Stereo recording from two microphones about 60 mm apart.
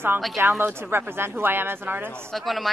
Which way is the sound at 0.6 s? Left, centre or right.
Right.